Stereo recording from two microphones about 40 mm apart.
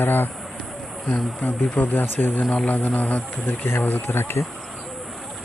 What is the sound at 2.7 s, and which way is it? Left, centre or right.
Speech, left.